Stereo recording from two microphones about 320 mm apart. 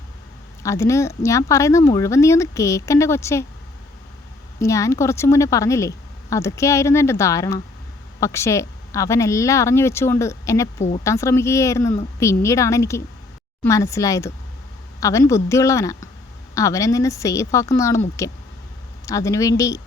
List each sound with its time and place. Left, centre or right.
0.6 s speech: centre
4.6 s speech: centre
10.8 s speech: left
11.0 s speech: centre
19.0 s speech: centre